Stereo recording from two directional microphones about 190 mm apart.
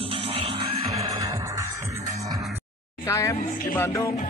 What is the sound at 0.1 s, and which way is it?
Music, 30° right (ahead or behind).